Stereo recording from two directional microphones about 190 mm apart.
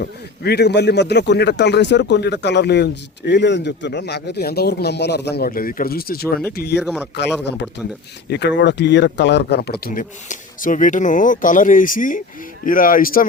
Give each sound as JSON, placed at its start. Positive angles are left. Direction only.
{"t": 0.0, "sound": "a man's voice", "side_deg": 60}
{"t": 6.7, "sound": "speech", "side_deg": -5}
{"t": 8.3, "sound": "speech", "side_deg": 65}